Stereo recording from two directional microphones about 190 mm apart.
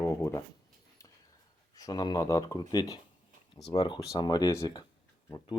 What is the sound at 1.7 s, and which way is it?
Speech, 20° left (ahead or behind).